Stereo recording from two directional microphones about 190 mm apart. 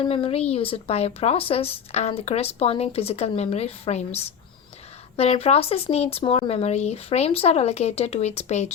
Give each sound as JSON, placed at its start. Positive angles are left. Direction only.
{"t": 0.0, "sound": "speech", "side_deg": 30}